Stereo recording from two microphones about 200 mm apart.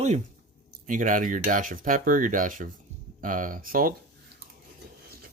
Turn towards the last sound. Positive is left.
turn(degrees=-45)  # may be behind; listen again after turning